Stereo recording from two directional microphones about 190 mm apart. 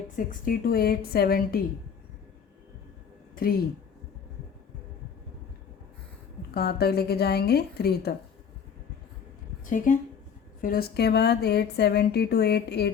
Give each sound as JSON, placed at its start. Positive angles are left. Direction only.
{"t": 0.2, "sound": "a woman's voice", "side_deg": 45}
{"t": 3.3, "sound": "speech", "side_deg": 50}
{"t": 6.5, "sound": "a woman's voice", "side_deg": 55}
{"t": 9.6, "sound": "a woman's voice", "side_deg": 45}